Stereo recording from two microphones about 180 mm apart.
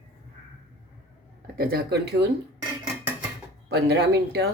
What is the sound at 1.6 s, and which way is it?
Speech, 60° right (ahead or behind).